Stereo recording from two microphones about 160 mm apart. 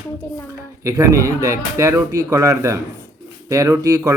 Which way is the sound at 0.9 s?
20° right (ahead or behind).